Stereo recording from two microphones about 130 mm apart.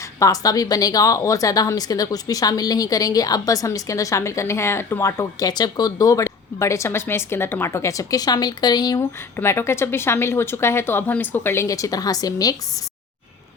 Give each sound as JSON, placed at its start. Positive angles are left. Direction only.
{"t": 0.2, "sound": "a woman's voice", "side_deg": 25}
{"t": 9.0, "sound": "a woman's voice", "side_deg": 20}